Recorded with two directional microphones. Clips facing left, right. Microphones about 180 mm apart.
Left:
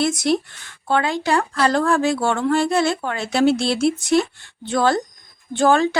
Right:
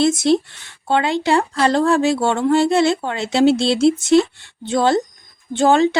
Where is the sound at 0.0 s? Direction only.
25° right (ahead or behind).